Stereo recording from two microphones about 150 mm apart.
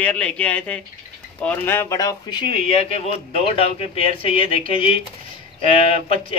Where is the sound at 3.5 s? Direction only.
40° left (ahead or behind).